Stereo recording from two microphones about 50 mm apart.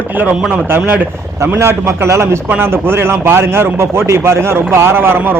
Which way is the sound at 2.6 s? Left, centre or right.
Right.